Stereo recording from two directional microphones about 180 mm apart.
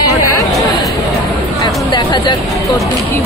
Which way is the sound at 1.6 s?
25° left (ahead or behind).